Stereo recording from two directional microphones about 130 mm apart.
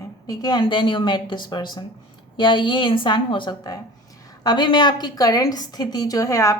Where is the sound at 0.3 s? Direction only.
35° left (ahead or behind).